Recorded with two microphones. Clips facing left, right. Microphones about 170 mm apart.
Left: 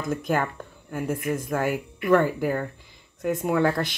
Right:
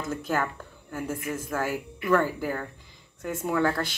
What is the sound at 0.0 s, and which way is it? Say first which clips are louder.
Speech: left 3 dB; 15° left (ahead or behind).